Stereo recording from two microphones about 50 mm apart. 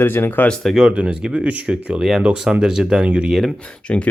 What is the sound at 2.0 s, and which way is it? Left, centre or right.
Speech, centre.